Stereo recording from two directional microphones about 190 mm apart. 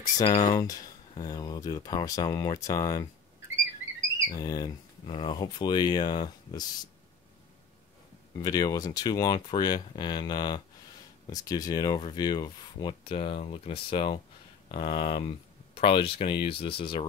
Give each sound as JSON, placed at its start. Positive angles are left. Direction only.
{"t": 0.3, "sound": "speech", "side_deg": 35}
{"t": 0.6, "sound": "speech", "side_deg": 20}
{"t": 4.3, "sound": "speech", "side_deg": 20}
{"t": 8.4, "sound": "speech", "side_deg": 20}